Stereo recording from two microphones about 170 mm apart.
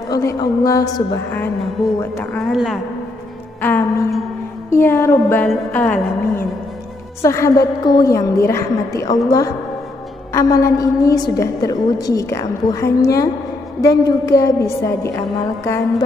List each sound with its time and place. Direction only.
0.1 s a woman's voice: 20° left (ahead or behind)
2.3 s a woman's voice: centre (ahead or behind)
3.6 s music: 10° left (ahead or behind)
5.5 s music: 5° left (ahead or behind)
7.2 s a woman's voice: 15° left (ahead or behind)
10.3 s a woman's voice: 20° left (ahead or behind)